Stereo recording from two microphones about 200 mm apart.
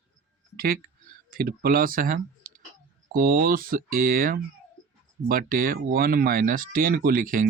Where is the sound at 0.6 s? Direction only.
45° right (ahead or behind).